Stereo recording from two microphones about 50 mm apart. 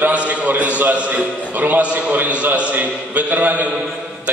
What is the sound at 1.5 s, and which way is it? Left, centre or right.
A man's voice, right.